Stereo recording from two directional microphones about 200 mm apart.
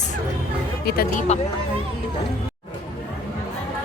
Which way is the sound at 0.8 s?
50° left (ahead or behind).